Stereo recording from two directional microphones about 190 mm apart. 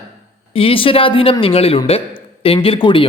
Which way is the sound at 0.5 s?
30° left (ahead or behind).